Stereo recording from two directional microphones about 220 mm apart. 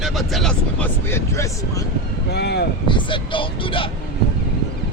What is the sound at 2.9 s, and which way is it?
Speech, 20° left (ahead or behind).